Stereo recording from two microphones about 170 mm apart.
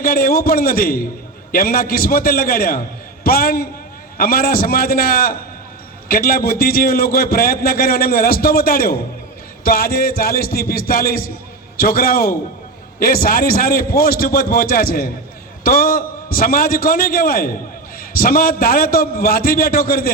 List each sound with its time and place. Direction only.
0.0 s a man's voice: 60° left (ahead or behind)